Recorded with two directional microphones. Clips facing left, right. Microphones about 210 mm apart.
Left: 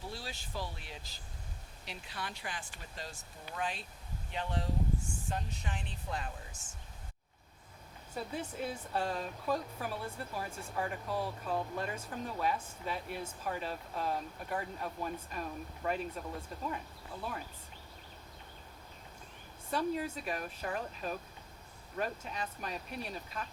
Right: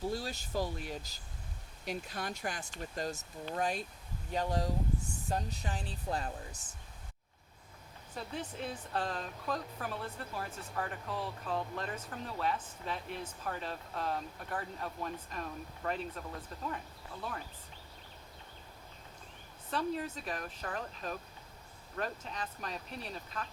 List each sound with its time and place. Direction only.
0.1 s speech: 40° right (ahead or behind)
8.1 s speech: 5° left (ahead or behind)
19.7 s speech: 10° left (ahead or behind)